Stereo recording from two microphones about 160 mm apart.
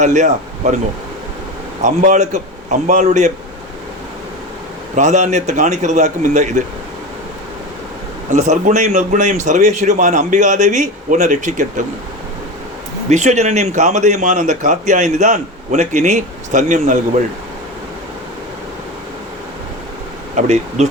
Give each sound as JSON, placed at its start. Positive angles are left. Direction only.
{"t": 0.0, "sound": "speech", "side_deg": -50}
{"t": 1.8, "sound": "speech", "side_deg": -50}
{"t": 4.9, "sound": "speech", "side_deg": -45}
{"t": 8.3, "sound": "speech", "side_deg": -45}
{"t": 13.1, "sound": "speech", "side_deg": -45}
{"t": 20.3, "sound": "speech", "side_deg": -45}